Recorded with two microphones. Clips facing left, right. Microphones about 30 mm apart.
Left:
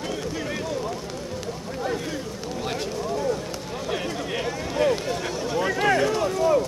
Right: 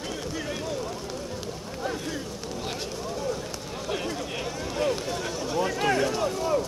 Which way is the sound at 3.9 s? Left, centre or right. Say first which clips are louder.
Left 3 dB; centre.